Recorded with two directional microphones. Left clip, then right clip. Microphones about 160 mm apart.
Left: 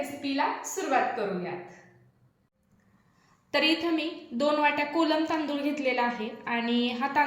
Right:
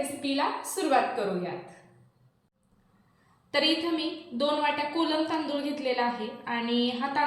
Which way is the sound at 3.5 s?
50° left (ahead or behind).